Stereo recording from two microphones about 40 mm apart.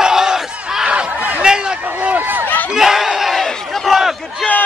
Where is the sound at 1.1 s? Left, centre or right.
Right.